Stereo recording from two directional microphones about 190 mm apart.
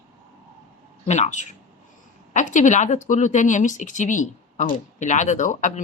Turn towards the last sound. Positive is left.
turn(degrees=40)  # may be behind; listen again after turning